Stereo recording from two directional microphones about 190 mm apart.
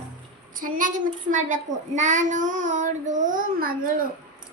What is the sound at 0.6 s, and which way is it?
A child's voice, 45° right (ahead or behind).